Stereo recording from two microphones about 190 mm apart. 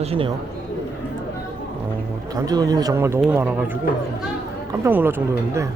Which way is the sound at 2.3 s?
20° right (ahead or behind).